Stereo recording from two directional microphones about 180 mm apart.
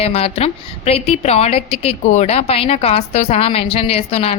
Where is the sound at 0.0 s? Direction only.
35° left (ahead or behind).